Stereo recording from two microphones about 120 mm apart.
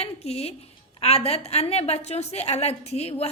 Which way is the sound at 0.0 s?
60° left (ahead or behind).